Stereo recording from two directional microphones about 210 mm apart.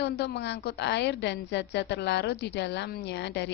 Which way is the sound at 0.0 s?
55° left (ahead or behind).